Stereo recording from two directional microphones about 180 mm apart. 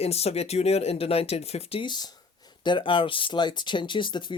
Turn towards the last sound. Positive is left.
turn(degrees=25)  # may be behind; listen again after turning